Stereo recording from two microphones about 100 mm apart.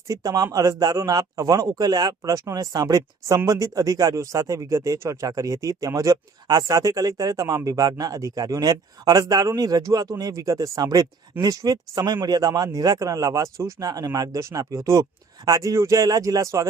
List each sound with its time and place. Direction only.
0.1 s a man's voice: 35° right (ahead or behind)